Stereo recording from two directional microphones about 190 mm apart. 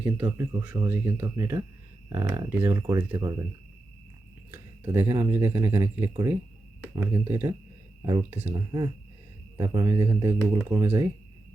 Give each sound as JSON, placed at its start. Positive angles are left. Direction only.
{"t": 0.0, "sound": "speech", "side_deg": -10}
{"t": 4.5, "sound": "a sound", "side_deg": -10}
{"t": 5.1, "sound": "speech", "side_deg": -15}
{"t": 8.5, "sound": "speech", "side_deg": -20}